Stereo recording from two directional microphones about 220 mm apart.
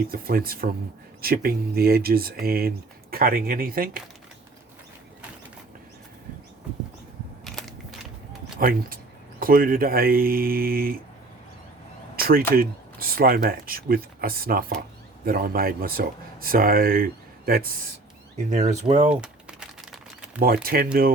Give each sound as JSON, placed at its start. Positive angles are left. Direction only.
{"t": 0.1, "sound": "speech", "side_deg": -40}
{"t": 7.4, "sound": "crushing", "side_deg": 0}
{"t": 8.5, "sound": "speech", "side_deg": -40}
{"t": 12.1, "sound": "speech", "side_deg": -40}
{"t": 18.5, "sound": "speech", "side_deg": -30}
{"t": 19.1, "sound": "crumpling", "side_deg": -5}
{"t": 20.4, "sound": "speech", "side_deg": -40}